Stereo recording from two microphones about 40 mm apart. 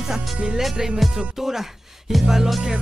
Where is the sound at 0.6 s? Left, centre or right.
Centre.